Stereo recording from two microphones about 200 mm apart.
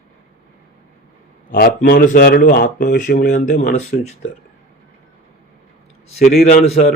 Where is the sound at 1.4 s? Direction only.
45° left (ahead or behind).